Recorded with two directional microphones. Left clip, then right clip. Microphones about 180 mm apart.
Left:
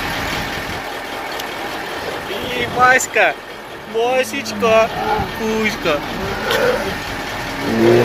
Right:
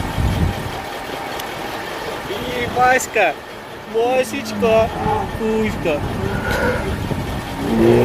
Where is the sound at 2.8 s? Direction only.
20° right (ahead or behind).